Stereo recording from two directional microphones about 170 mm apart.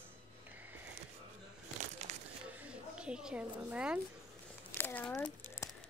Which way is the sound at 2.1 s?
40° right (ahead or behind).